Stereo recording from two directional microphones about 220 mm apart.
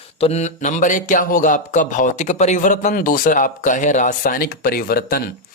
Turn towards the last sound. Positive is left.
turn(degrees=40)  # may be behind; listen again after turning